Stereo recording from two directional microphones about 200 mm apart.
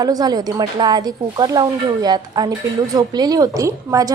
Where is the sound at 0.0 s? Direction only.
20° right (ahead or behind).